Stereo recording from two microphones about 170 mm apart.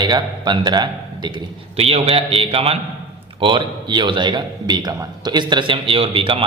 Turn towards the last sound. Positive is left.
turn(degrees=-30)  # may be behind; listen again after turning